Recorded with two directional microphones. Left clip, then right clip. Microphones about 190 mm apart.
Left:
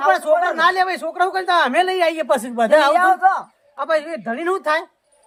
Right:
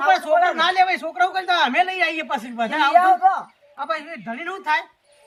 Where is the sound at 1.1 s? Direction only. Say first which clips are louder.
Left 2 dB; 30° left (ahead or behind).